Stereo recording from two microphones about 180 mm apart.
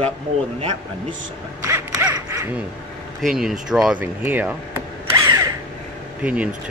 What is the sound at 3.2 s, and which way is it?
Speech, centre (ahead or behind).